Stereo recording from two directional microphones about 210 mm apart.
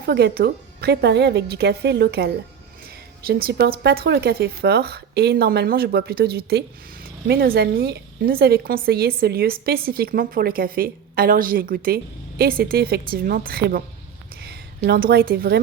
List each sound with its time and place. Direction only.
0.0 s a woman's voice: 50° right (ahead or behind)